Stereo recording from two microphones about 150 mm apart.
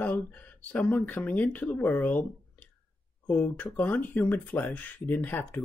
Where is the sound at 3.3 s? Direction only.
5° left (ahead or behind).